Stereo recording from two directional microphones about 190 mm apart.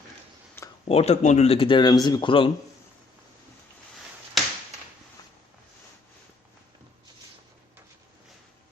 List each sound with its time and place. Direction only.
0.9 s speech: 35° left (ahead or behind)